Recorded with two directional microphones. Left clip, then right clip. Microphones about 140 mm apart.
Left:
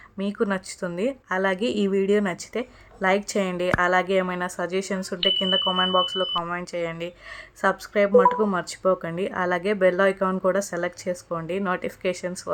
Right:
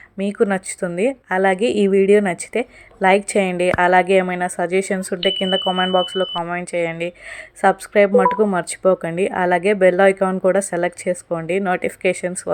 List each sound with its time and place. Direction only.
0.2 s speech: 25° right (ahead or behind)